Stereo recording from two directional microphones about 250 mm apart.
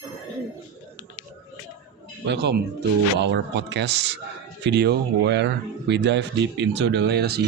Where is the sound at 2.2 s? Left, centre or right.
Right.